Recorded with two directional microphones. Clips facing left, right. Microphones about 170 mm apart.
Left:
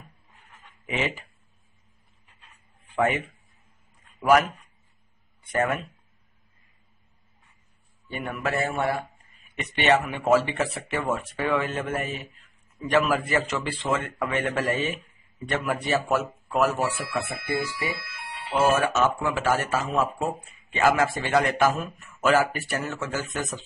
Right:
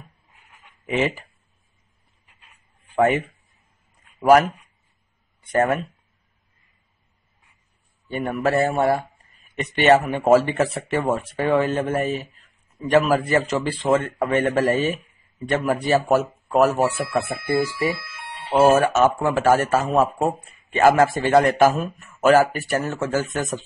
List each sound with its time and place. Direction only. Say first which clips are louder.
0.3 s dog: even; 10° right (ahead or behind)
0.8 s speech: right 6 dB; 40° right (ahead or behind)
2.2 s a sound: even; 10° right (ahead or behind)
3.0 s speech: right 6 dB; 40° right (ahead or behind)
5.5 s speech: right 5 dB; 40° right (ahead or behind)
8.1 s speech: right 7 dB; 40° right (ahead or behind)
16.8 s speech: right 6 dB; 35° right (ahead or behind)
18.2 s speech: right 7 dB; 40° right (ahead or behind)
21.1 s speech: right 7 dB; 30° right (ahead or behind)
21.4 s speech: right 6 dB; 40° right (ahead or behind)